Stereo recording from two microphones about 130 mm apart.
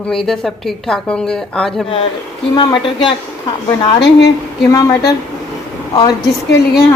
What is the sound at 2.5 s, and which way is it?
Speech, 40° left (ahead or behind).